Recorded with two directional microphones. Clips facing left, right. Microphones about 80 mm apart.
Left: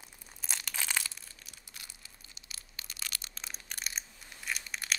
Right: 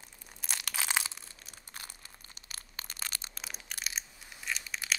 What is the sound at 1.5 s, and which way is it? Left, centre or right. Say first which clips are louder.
Crumpling: right 7 dB; right.